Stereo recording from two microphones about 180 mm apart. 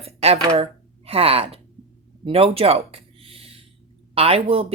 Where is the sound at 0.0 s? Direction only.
35° right (ahead or behind).